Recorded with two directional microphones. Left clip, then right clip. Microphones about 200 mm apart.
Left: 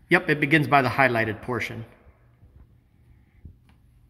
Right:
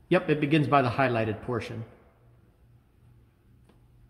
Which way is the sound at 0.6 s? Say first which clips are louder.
Left 3 dB; 20° left (ahead or behind).